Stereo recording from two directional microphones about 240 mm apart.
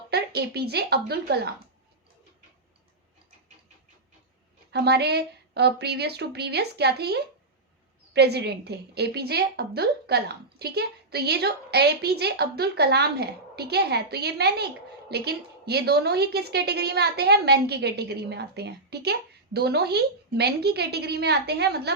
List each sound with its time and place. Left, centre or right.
0.1 s a woman's voice: right
4.7 s a woman's voice: right